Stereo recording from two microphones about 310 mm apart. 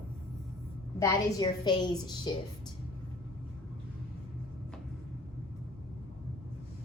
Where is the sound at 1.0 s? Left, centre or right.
Centre.